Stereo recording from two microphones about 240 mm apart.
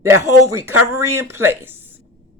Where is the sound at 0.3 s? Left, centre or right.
Right.